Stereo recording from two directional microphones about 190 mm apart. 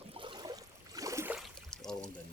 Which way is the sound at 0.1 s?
25° right (ahead or behind).